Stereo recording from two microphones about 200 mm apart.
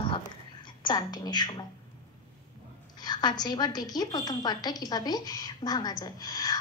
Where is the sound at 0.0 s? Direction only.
25° left (ahead or behind).